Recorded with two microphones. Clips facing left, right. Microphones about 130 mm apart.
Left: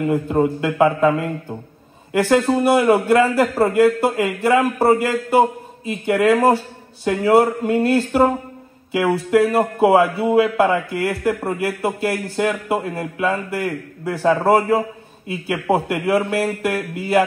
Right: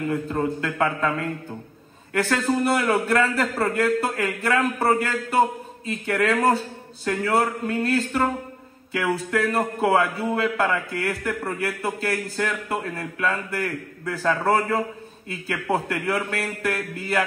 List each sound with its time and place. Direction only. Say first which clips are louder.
0.0 s a man's voice: left 7 dB; 25° left (ahead or behind)
9.3 s a man's voice: left 10 dB; 25° left (ahead or behind)